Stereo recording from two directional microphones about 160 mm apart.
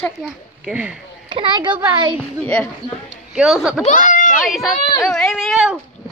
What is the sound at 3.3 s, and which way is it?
Speech, 5° right (ahead or behind).